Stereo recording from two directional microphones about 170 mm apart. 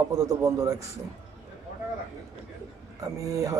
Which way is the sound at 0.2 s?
20° right (ahead or behind).